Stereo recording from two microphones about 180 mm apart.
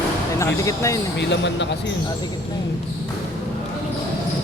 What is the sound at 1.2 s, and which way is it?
Speech, 75° left (ahead or behind).